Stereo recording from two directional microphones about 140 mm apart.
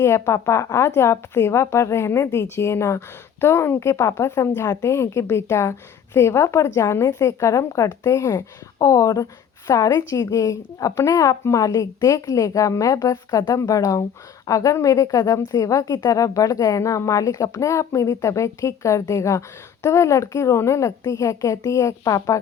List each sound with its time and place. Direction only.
0.0 s a woman's voice: 20° left (ahead or behind)